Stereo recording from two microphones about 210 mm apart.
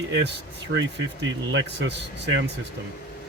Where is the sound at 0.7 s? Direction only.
60° right (ahead or behind).